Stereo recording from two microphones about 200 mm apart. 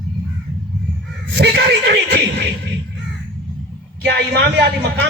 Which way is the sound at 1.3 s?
55° right (ahead or behind).